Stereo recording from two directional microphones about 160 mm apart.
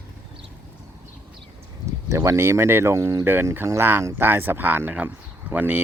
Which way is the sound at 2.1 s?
20° right (ahead or behind).